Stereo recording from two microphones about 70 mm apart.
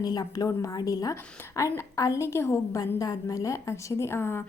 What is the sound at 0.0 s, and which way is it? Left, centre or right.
Speech, left.